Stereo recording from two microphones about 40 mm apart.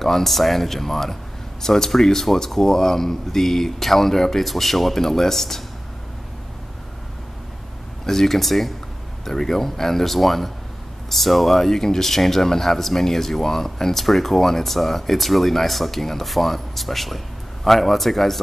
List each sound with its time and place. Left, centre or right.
0.0 s speech: centre
8.0 s speech: centre